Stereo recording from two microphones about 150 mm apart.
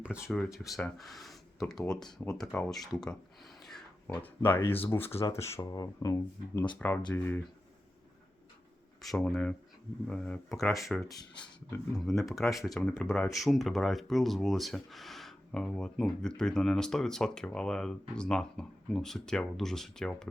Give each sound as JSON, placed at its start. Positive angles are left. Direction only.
{"t": 0.3, "sound": "speech", "side_deg": 0}
{"t": 3.6, "sound": "a sound", "side_deg": 0}
{"t": 4.9, "sound": "speech", "side_deg": 15}
{"t": 9.0, "sound": "speech", "side_deg": 0}
{"t": 11.9, "sound": "speech", "side_deg": 0}